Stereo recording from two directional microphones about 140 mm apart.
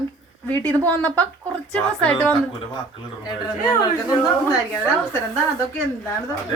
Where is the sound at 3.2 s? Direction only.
25° left (ahead or behind).